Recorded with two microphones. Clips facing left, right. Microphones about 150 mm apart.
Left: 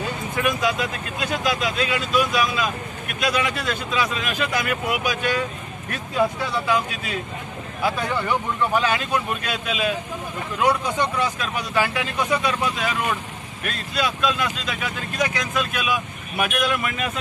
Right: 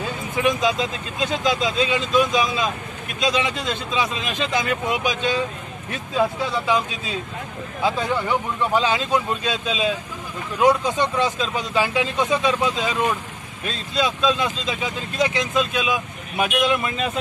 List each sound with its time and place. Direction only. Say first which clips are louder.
0.4 s speech: right 3 dB; 20° right (ahead or behind)